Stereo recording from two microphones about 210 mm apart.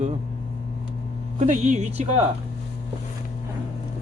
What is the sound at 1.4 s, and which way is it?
Speech, 35° right (ahead or behind).